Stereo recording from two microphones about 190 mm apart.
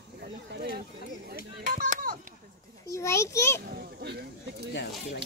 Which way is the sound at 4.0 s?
60° right (ahead or behind).